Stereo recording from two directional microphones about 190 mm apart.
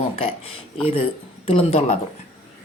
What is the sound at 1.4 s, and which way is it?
Speech, 30° left (ahead or behind).